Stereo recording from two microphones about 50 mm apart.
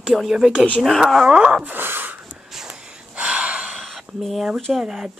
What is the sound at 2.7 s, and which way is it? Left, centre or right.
Gasp, centre.